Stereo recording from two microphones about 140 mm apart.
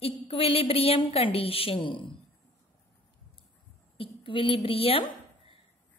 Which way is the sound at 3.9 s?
40° left (ahead or behind).